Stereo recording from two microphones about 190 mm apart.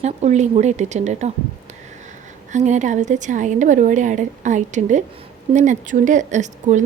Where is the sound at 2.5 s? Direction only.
40° right (ahead or behind).